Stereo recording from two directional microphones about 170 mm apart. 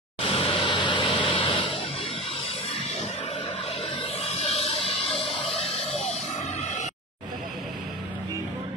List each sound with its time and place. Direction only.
0.2 s vehicle: 35° left (ahead or behind)
4.2 s music: 35° left (ahead or behind)
5.4 s music: centre (ahead or behind)